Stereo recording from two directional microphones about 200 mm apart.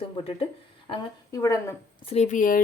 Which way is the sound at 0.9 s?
15° left (ahead or behind).